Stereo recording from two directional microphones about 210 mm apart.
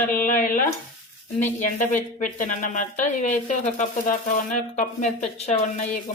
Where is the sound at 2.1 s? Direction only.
40° left (ahead or behind).